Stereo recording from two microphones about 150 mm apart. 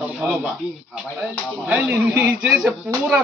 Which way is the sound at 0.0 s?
5° right (ahead or behind).